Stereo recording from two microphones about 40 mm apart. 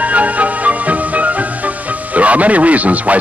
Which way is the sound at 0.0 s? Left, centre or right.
Right.